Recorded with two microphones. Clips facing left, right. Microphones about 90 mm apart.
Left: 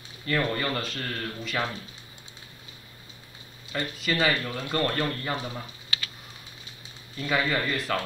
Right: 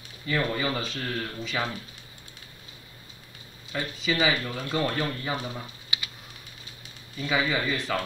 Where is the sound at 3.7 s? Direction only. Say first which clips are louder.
Even; centre (ahead or behind).